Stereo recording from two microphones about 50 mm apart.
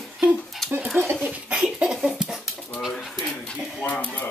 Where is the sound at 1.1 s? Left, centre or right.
Right.